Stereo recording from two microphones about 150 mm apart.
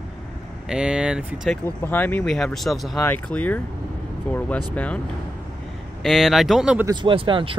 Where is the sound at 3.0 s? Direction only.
10° left (ahead or behind).